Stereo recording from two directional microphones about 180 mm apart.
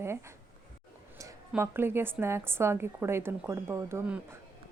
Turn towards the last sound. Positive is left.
turn(degrees=-10)  # may be behind; listen again after turning